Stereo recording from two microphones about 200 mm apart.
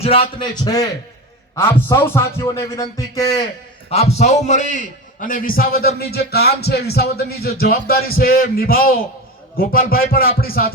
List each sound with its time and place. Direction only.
0.0 s a man's voice: 30° left (ahead or behind)
3.8 s a man's voice: 30° left (ahead or behind); by 5.9 s 50° left (ahead or behind)
6.0 s music: 55° left (ahead or behind)